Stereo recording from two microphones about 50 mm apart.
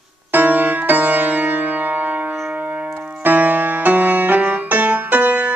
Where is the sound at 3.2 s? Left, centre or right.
Right.